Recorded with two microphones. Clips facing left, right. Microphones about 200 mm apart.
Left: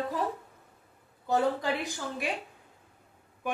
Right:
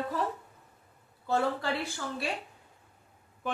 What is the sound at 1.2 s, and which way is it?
A woman's voice, 15° left (ahead or behind).